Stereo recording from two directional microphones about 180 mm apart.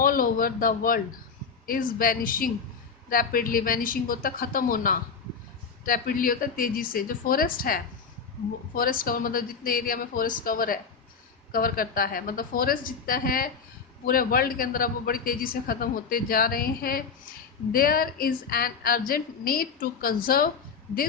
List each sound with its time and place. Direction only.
0.0 s a man's voice: 50° left (ahead or behind)